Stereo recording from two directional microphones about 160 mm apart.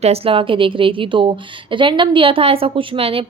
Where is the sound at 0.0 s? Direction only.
35° right (ahead or behind).